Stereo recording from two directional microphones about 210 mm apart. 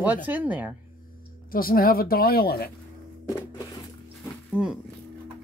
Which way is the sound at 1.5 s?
45° left (ahead or behind).